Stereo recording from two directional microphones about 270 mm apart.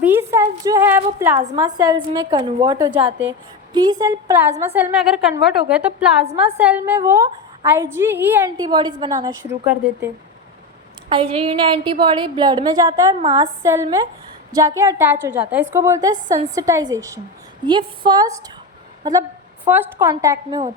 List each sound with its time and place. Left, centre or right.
0.0 s a woman's voice: centre
11.1 s a woman's voice: centre